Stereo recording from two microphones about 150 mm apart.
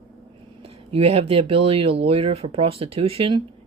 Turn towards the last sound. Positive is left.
turn(degrees=-40)  # may be behind; listen again after turning